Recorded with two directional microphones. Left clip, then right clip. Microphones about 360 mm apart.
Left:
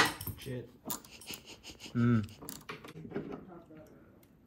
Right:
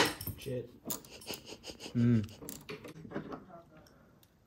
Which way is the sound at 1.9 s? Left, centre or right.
Centre.